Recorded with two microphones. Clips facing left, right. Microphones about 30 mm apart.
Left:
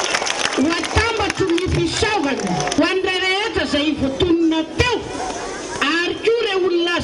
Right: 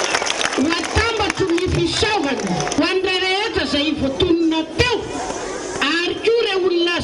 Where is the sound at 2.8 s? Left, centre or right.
Right.